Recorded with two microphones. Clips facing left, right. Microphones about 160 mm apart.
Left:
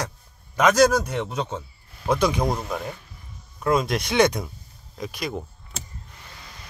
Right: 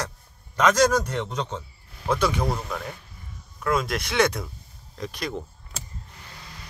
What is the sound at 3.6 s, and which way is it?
A man's voice, 20° left (ahead or behind).